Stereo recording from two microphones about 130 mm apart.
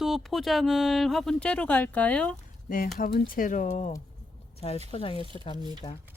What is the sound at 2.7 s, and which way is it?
Speech, 90° left.